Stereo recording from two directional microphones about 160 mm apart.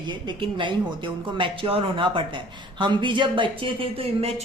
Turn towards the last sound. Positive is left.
turn(degrees=-40)  # may be behind; listen again after turning